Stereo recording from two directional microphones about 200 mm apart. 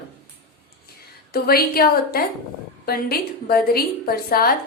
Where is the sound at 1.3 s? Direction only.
50° left (ahead or behind).